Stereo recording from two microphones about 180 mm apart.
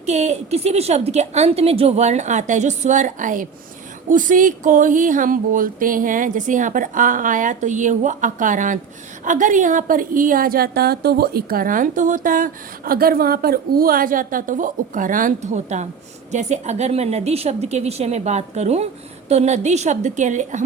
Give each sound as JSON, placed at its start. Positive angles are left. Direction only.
{"t": 0.0, "sound": "a woman's voice", "side_deg": -40}